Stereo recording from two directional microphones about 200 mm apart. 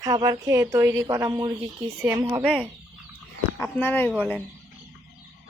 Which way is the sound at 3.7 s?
10° left (ahead or behind).